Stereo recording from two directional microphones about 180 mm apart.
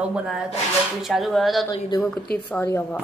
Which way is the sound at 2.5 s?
10° left (ahead or behind).